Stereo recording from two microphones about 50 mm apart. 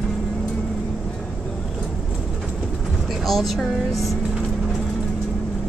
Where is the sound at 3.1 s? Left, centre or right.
Centre.